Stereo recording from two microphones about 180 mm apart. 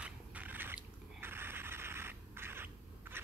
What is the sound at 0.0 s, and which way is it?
Mechanisms, 10° right (ahead or behind).